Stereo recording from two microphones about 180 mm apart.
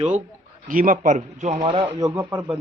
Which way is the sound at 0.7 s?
50° right (ahead or behind).